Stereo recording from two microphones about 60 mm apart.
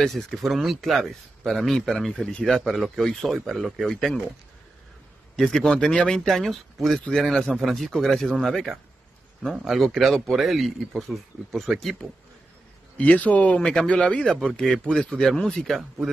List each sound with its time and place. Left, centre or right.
0.0 s a man's voice: centre
5.3 s a man's voice: centre
9.4 s a man's voice: centre
12.9 s a man's voice: left
13.6 s a man's voice: centre